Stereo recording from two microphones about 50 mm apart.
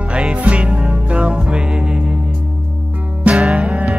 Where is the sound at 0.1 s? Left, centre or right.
Right.